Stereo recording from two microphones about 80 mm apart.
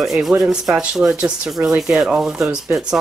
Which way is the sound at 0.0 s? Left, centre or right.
Centre.